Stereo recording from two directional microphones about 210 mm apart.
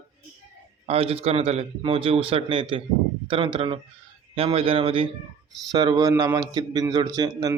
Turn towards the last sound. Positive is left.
turn(degrees=-20)  # may be behind; listen again after turning